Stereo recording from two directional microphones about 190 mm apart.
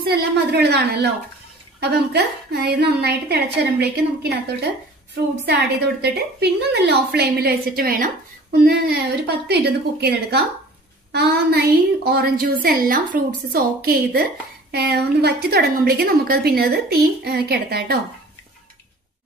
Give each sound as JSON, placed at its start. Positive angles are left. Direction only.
{"t": 0.0, "sound": "a woman's voice", "side_deg": -55}
{"t": 5.4, "sound": "a woman's voice", "side_deg": -60}